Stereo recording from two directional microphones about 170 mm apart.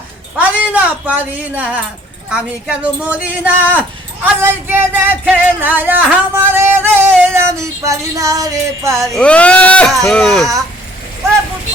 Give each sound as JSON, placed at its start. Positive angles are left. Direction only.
{"t": 0.3, "sound": "speech", "side_deg": -10}
{"t": 7.9, "sound": "music", "side_deg": -20}
{"t": 9.1, "sound": "speech", "side_deg": 5}